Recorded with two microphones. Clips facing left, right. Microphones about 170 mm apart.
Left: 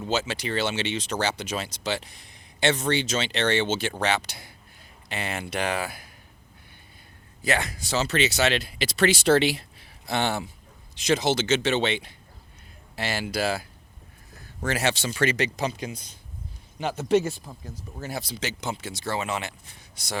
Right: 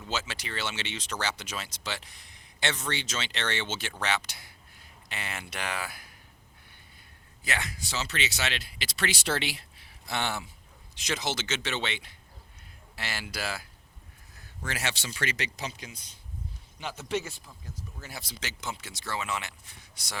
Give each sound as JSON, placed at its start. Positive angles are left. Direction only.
{"t": 0.0, "sound": "speech", "side_deg": 25}
{"t": 7.4, "sound": "speech", "side_deg": 40}
{"t": 14.6, "sound": "speech", "side_deg": 40}